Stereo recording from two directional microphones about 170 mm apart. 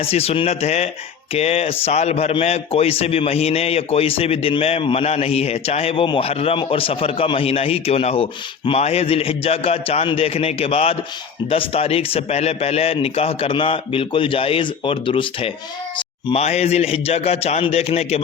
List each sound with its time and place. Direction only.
0.0 s a man's voice: 35° left (ahead or behind)